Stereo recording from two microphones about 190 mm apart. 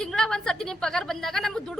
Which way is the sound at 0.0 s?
5° left (ahead or behind).